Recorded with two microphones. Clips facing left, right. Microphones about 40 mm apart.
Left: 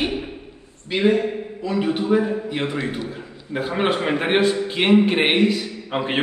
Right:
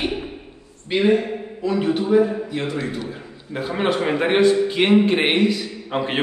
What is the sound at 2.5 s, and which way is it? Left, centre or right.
Speech, left.